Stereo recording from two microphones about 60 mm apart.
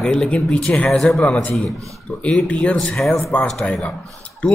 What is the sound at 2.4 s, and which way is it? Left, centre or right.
A man's voice, left.